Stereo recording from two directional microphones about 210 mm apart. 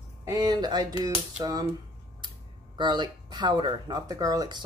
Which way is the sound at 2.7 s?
20° right (ahead or behind).